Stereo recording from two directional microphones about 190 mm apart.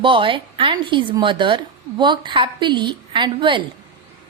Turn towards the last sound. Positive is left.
turn(degrees=-25)  # may be behind; listen again after turning